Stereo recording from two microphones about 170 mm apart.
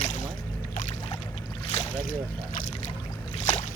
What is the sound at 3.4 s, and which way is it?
Boat, 40° left (ahead or behind).